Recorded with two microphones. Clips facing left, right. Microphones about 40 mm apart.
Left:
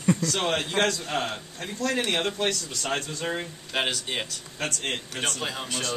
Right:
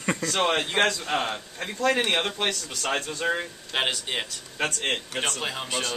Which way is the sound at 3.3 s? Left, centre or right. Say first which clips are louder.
Right 1 dB; centre.